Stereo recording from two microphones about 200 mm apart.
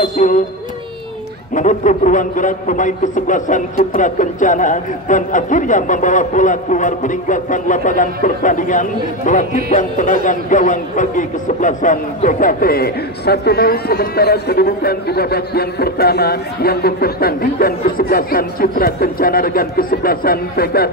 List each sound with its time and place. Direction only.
0.2 s music: 40° left (ahead or behind)
1.5 s a man's voice: 40° left (ahead or behind)